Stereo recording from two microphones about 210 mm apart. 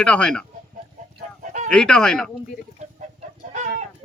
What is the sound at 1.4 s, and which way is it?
Fowl, 35° right (ahead or behind).